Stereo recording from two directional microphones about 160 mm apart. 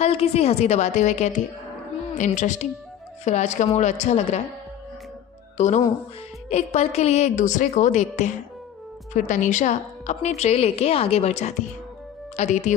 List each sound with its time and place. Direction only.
0.0 s a woman's voice: 40° left (ahead or behind)
5.6 s a woman's voice: 45° left (ahead or behind)